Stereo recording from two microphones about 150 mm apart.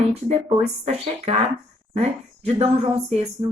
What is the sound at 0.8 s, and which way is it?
Speech, 40° right (ahead or behind).